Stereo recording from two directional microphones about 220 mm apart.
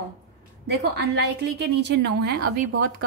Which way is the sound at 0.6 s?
50° right (ahead or behind).